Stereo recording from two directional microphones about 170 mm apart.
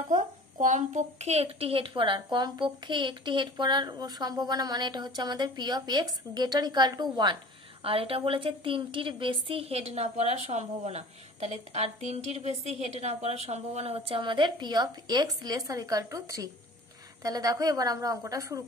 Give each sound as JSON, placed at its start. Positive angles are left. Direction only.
{"t": 0.1, "sound": "a woman's voice", "side_deg": -45}